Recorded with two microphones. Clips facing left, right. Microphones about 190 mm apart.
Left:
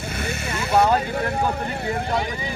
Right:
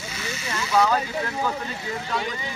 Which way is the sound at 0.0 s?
55° left (ahead or behind).